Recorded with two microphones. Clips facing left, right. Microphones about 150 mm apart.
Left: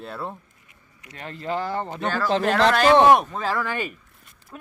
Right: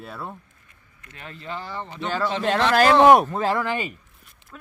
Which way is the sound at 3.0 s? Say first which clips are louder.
Right 2 dB; 10° right (ahead or behind).